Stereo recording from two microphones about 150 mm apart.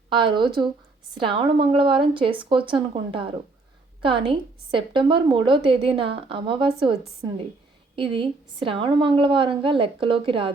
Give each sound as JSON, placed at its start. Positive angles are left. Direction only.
{"t": 0.1, "sound": "a woman's voice", "side_deg": -35}